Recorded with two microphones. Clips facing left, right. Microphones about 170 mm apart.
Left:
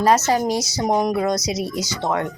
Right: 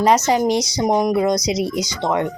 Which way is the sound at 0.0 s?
15° right (ahead or behind).